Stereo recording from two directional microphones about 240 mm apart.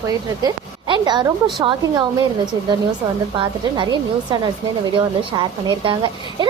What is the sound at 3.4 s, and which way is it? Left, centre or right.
A woman's voice, centre.